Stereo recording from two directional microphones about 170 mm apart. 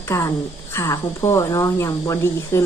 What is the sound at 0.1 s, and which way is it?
Speech, 15° left (ahead or behind).